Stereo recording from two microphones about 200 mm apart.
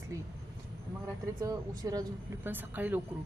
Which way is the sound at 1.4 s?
15° right (ahead or behind).